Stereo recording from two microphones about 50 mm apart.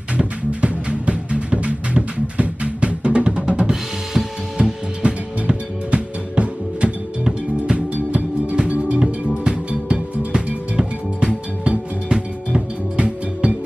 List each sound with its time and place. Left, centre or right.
0.2 s music: right